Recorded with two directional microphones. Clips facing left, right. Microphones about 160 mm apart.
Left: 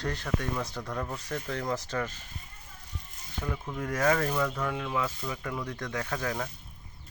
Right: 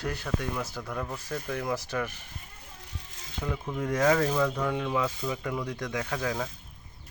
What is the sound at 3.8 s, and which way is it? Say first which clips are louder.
Speech: right 3 dB; 15° right (ahead or behind).